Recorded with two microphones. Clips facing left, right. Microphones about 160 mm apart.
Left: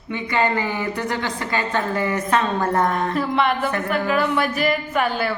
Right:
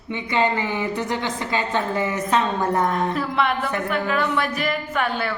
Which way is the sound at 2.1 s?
20° right (ahead or behind).